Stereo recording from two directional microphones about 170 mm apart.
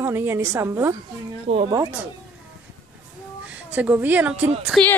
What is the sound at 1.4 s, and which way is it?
Speech, 35° right (ahead or behind).